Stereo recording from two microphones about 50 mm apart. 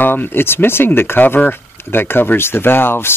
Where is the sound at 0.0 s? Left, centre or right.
Left.